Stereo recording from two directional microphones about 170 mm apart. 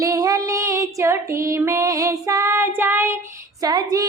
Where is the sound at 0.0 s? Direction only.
20° right (ahead or behind).